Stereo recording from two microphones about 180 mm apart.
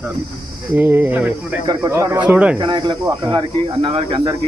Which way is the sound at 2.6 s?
25° right (ahead or behind).